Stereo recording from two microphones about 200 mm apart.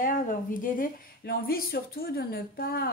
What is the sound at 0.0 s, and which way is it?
A woman's voice, 40° left (ahead or behind).